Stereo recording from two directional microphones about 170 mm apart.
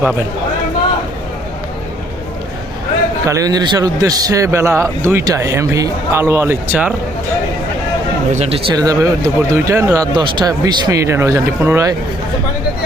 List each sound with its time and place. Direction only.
3.2 s a man's voice: 20° right (ahead or behind)
8.3 s speech: 40° right (ahead or behind)
8.7 s speech: 20° right (ahead or behind)